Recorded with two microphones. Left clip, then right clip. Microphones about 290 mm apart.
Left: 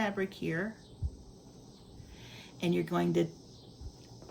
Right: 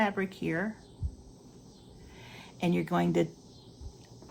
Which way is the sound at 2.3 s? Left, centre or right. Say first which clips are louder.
Right 1 dB; centre.